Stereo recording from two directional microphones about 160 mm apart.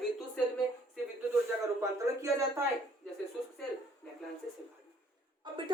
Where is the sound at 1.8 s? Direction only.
20° right (ahead or behind).